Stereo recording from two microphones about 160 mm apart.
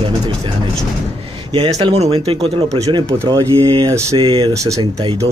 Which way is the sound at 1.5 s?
30° right (ahead or behind).